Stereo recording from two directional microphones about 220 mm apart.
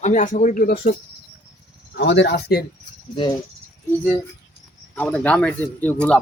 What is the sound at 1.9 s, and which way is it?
Speech, 55° left (ahead or behind).